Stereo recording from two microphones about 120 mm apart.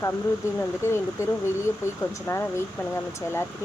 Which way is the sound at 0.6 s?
20° left (ahead or behind).